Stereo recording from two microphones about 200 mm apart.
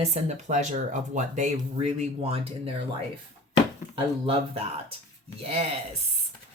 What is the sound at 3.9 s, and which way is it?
Speech, 25° right (ahead or behind).